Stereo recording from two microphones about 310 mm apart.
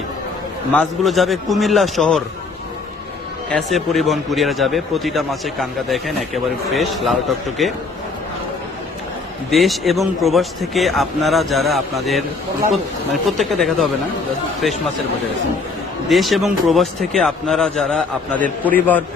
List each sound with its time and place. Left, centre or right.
0.7 s a man's voice: centre
3.5 s a man's voice: centre
9.5 s a man's voice: centre
13.3 s a man's voice: centre
16.0 s a man's voice: centre